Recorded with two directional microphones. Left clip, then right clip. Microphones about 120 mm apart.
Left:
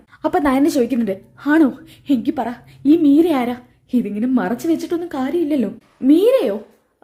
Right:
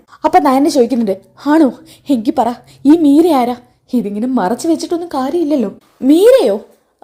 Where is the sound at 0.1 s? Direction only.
15° right (ahead or behind).